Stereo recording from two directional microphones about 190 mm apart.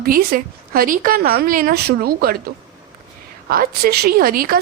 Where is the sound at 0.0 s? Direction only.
50° right (ahead or behind).